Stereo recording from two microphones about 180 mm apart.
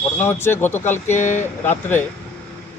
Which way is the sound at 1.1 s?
40° left (ahead or behind).